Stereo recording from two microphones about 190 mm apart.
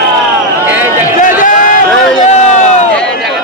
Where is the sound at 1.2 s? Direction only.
45° left (ahead or behind).